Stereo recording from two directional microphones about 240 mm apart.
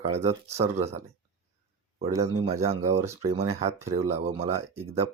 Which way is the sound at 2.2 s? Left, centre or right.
Right.